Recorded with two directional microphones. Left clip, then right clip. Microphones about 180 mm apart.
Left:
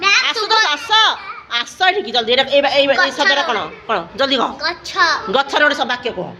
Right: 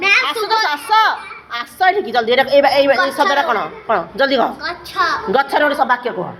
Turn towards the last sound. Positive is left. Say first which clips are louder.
# right 1 dB
turn(degrees=30)  # may be behind; listen again after turning